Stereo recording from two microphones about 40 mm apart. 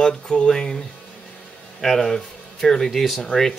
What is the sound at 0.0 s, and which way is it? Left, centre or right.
Speech, centre.